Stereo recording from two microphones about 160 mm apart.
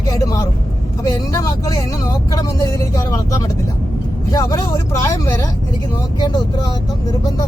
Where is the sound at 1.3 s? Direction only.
20° left (ahead or behind).